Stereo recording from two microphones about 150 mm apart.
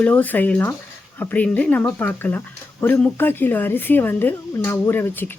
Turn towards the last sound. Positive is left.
turn(degrees=15)  # may be behind; listen again after turning